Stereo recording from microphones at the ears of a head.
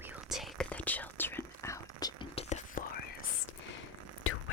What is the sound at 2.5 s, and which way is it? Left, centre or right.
Whispering, left.